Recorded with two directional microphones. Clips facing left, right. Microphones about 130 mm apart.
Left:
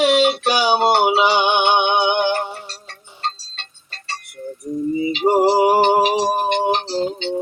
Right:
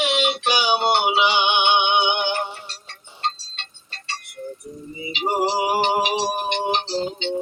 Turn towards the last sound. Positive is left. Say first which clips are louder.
# left 3 dB
turn(degrees=40)  # may be behind; listen again after turning